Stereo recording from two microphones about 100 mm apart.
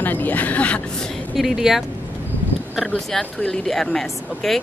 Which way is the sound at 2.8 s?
5° left (ahead or behind).